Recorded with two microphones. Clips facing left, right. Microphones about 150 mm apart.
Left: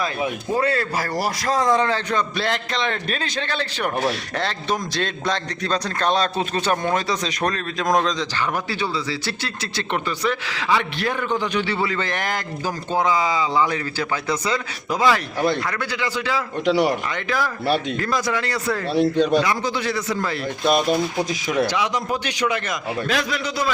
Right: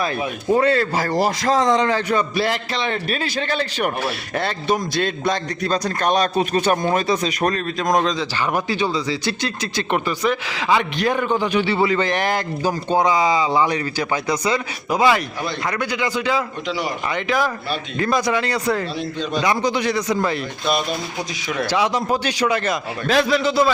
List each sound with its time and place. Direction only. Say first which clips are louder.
0.5 s speech: right 6 dB; 25° right (ahead or behind); by 8.1 s centre (ahead or behind)
8.4 s speech: right 3 dB; 15° right (ahead or behind)
16.6 s speech: left 6 dB; 65° left (ahead or behind)
17.2 s speech: left 1 dB; 15° right (ahead or behind)
19.1 s speech: left 7 dB; 65° left (ahead or behind)
19.4 s speech: right 2 dB; 20° right (ahead or behind)
21.7 s a man's voice: right 4 dB; 30° right (ahead or behind)